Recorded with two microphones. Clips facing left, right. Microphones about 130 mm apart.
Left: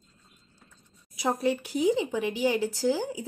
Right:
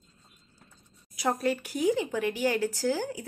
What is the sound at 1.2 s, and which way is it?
A woman's voice, 15° left (ahead or behind).